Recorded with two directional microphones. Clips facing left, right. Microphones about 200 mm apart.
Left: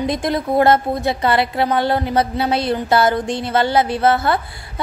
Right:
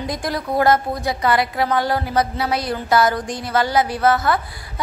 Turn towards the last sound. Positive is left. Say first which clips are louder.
# left 1 dB
turn(degrees=30)  # may be behind; listen again after turning